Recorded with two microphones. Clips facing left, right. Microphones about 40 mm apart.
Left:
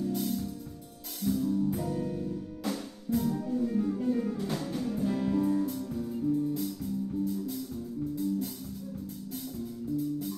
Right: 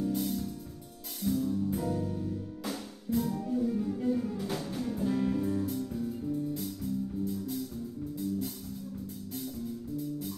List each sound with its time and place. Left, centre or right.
0.0 s music: centre
2.0 s music: centre
2.6 s music: centre
3.6 s music: centre
4.4 s music: centre